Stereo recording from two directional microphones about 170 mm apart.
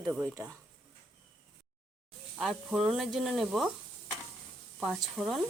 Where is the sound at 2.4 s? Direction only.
Centre (ahead or behind).